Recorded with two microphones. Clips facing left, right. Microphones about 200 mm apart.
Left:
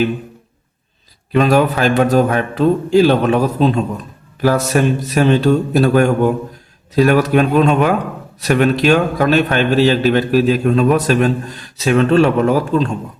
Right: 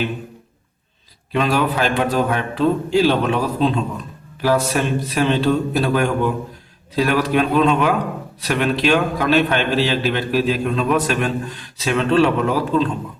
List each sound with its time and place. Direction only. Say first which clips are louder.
1.3 s a man's voice: left 6 dB; 45° left (ahead or behind)